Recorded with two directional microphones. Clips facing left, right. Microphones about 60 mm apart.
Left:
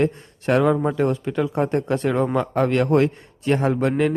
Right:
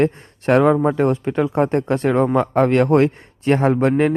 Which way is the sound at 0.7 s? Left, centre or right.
Right.